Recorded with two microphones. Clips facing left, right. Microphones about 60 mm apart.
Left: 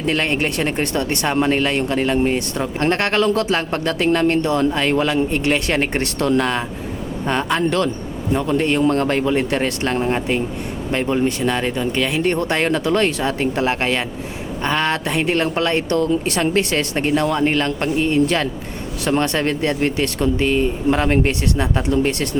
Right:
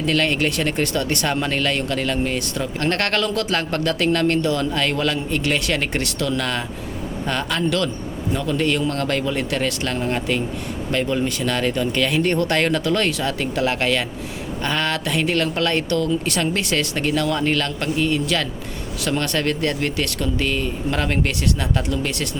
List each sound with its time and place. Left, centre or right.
0.0 s speech: left